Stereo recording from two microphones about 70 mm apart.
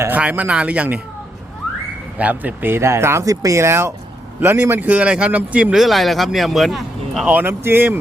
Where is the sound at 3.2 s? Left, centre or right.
Right; by 5.7 s centre.